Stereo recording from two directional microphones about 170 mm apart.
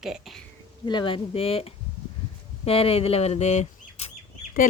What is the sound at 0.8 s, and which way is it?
A woman's voice, 25° left (ahead or behind).